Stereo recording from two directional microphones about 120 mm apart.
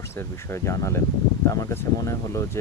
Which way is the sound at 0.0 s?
20° left (ahead or behind).